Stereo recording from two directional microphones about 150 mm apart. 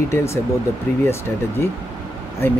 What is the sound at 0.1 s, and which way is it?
Speech, 15° left (ahead or behind).